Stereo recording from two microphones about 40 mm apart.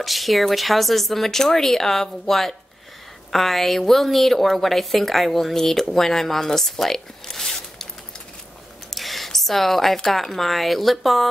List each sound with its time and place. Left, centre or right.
0.0 s a woman's voice: centre
8.9 s speech: centre